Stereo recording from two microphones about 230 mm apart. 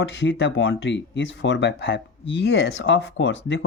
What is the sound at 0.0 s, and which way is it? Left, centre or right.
Speech, left.